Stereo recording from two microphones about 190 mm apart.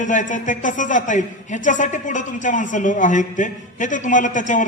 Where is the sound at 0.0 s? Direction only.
40° left (ahead or behind).